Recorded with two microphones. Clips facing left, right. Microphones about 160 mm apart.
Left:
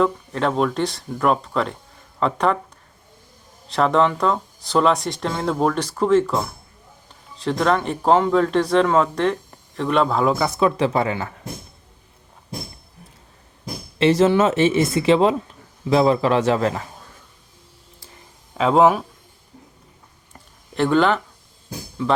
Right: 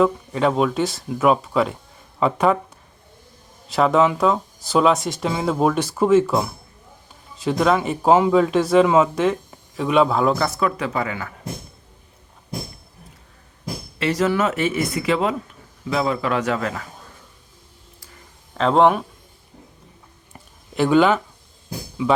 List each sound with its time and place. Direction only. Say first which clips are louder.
0.0 s speech: right 2 dB; 5° right (ahead or behind)
3.7 s speech: right 1 dB; 5° right (ahead or behind)
10.3 s speech: even; 10° left (ahead or behind)
10.6 s speech: left 4 dB; 25° left (ahead or behind)
14.0 s speech: left 5 dB; 25° left (ahead or behind)
18.5 s speech: left 1 dB; 5° left (ahead or behind)
20.7 s speech: right 2 dB; 5° right (ahead or behind)